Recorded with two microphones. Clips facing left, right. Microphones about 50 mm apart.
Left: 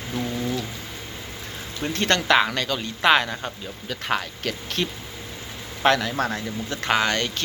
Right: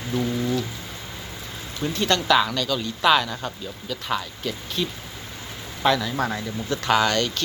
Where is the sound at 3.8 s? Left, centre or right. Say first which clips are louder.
Left 2 dB; left.